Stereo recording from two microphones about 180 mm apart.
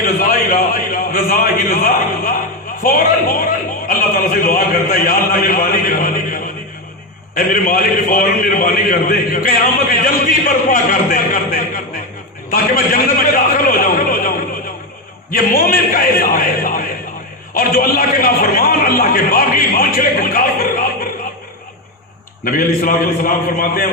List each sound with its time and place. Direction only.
0.0 s a man's voice: 55° left (ahead or behind)
12.5 s a sound: 55° left (ahead or behind)
15.3 s a man's voice: 55° left (ahead or behind)
22.4 s a man's voice: 50° left (ahead or behind)